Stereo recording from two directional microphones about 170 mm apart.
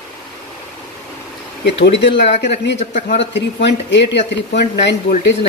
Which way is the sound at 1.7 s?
90° left.